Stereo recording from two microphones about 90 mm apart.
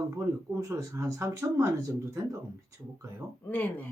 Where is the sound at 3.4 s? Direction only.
15° left (ahead or behind).